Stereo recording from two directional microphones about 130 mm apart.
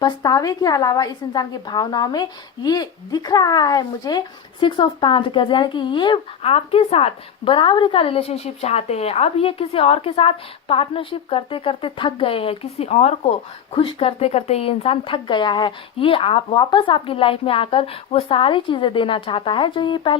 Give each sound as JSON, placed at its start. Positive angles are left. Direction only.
{"t": 0.0, "sound": "a woman's voice", "side_deg": 30}
{"t": 13.7, "sound": "speech", "side_deg": 45}